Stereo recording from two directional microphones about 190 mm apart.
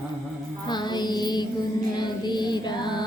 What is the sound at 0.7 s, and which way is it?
Music, 25° left (ahead or behind).